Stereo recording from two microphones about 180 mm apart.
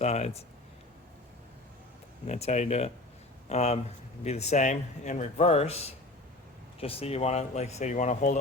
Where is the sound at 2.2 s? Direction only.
40° left (ahead or behind).